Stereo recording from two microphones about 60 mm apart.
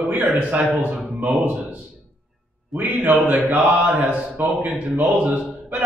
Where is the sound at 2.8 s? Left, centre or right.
Right.